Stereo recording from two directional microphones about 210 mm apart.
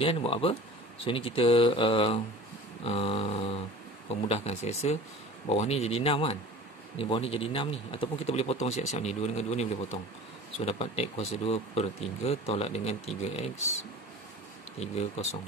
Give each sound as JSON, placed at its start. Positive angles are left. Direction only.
{"t": 0.0, "sound": "speech", "side_deg": 25}
{"t": 14.8, "sound": "speech", "side_deg": 30}